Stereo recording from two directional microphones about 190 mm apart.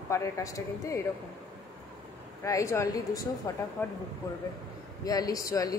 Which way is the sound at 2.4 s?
15° left (ahead or behind).